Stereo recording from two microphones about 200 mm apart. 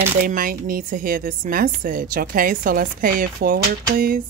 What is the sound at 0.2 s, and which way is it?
A woman's voice, 45° right (ahead or behind).